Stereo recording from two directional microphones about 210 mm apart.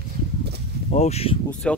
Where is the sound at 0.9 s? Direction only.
30° left (ahead or behind).